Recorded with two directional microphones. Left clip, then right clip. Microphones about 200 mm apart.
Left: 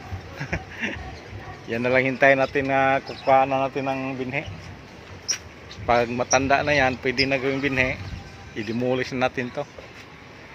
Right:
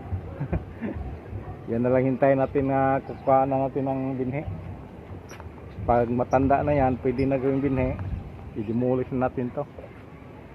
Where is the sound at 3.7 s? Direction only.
25° left (ahead or behind).